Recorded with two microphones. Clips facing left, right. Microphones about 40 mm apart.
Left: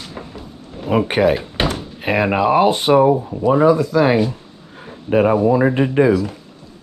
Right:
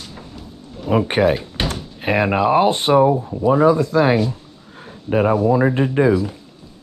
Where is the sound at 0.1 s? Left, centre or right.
Left.